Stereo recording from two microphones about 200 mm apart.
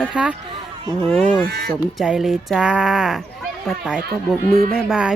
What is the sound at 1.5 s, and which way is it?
Speech, 50° right (ahead or behind).